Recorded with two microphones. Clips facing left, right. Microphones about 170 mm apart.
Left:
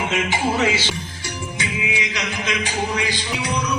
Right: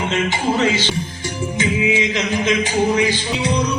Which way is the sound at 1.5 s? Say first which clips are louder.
Right 9 dB; 25° right (ahead or behind).